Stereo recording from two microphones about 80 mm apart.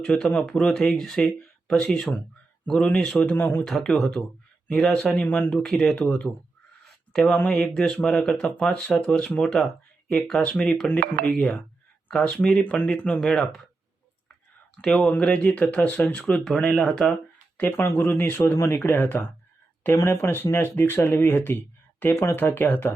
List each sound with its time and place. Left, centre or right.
0.0 s speech: centre
3.2 s speech: left
3.7 s speech: centre
5.5 s speech: centre
13.1 s speech: centre
14.8 s speech: centre
15.1 s speech: centre
17.6 s speech: left